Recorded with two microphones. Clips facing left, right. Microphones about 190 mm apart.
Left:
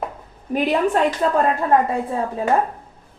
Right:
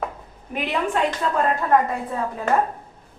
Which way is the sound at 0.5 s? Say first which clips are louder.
Left 6 dB; 40° left (ahead or behind).